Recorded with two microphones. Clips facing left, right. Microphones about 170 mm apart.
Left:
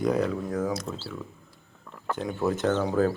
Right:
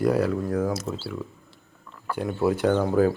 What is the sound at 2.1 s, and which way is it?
Speech, 10° right (ahead or behind).